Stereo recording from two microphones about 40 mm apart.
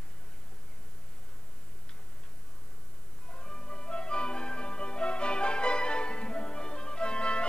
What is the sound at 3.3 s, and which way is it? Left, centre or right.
Music, left.